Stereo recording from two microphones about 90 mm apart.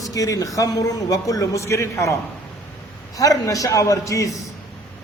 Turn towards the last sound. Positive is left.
turn(degrees=40)  # may be behind; listen again after turning